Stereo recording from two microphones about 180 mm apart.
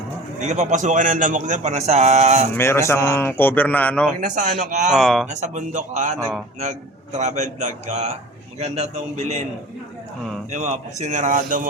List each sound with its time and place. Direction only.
0.3 s a man's voice: 40° right (ahead or behind)
2.6 s a man's voice: 15° left (ahead or behind)
4.2 s a man's voice: 45° right (ahead or behind)
4.9 s speech: centre (ahead or behind)
5.3 s a man's voice: 40° right (ahead or behind)
10.5 s a man's voice: 40° right (ahead or behind)